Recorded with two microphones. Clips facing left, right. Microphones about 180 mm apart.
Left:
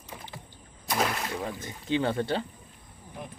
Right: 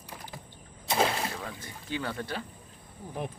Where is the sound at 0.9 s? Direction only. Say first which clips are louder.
Right 1 dB; 30° right (ahead or behind).